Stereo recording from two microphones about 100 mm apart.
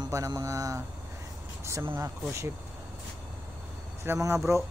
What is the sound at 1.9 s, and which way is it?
Speech, 30° right (ahead or behind).